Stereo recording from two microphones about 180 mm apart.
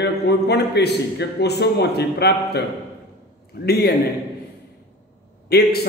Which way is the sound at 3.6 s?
60° left (ahead or behind).